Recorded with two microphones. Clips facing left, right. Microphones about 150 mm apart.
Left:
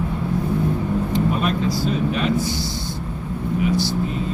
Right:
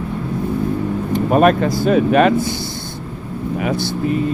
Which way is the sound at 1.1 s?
55° right (ahead or behind).